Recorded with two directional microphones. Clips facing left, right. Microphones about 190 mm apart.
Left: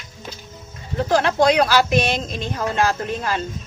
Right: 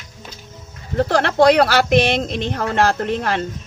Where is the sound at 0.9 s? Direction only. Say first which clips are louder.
Right 1 dB; 65° right (ahead or behind).